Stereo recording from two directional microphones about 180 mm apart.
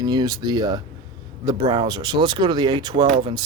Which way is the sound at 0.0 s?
20° right (ahead or behind).